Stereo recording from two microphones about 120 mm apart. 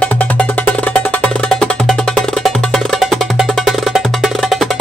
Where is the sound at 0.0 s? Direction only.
10° left (ahead or behind).